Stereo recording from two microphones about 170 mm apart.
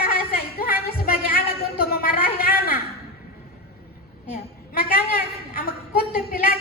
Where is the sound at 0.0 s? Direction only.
60° left (ahead or behind).